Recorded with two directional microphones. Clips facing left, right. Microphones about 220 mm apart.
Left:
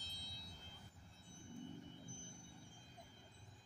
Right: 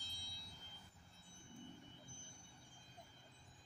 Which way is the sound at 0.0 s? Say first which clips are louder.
Left 2 dB; 40° left (ahead or behind).